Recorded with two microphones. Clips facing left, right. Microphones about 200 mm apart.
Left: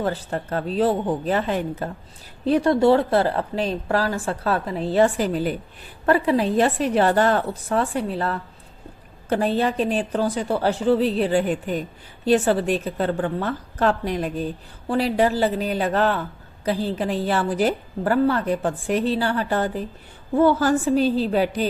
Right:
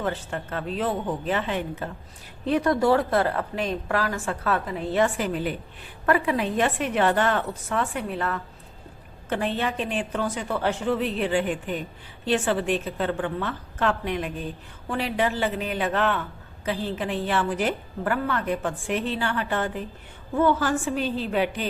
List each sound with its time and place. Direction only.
0.0 s a woman's voice: 35° left (ahead or behind)